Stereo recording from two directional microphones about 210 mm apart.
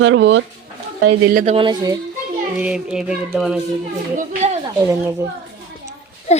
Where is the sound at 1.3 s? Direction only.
30° right (ahead or behind).